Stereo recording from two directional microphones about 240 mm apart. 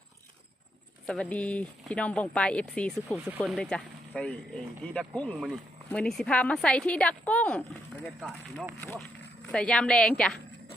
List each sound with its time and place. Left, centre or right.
1.0 s speech: centre